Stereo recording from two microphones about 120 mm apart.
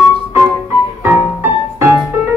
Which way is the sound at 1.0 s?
15° right (ahead or behind).